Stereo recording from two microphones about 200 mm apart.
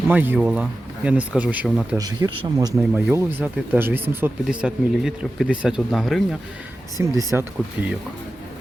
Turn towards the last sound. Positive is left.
turn(degrees=-10)  # may be behind; listen again after turning